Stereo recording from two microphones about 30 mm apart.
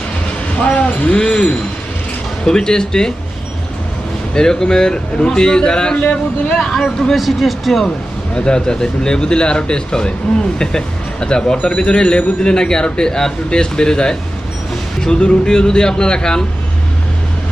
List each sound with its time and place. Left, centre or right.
0.6 s speech: left
1.1 s speech: left
4.4 s speech: left
6.0 s speech: left
7.2 s speech: centre
8.4 s speech: left
13.5 s speech: left